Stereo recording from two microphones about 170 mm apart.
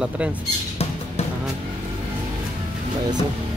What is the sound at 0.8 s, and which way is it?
Music, 40° left (ahead or behind).